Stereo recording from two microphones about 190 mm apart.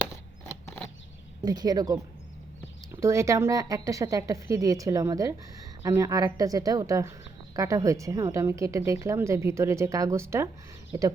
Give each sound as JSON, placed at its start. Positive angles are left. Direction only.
{"t": 1.4, "sound": "a woman's voice", "side_deg": -20}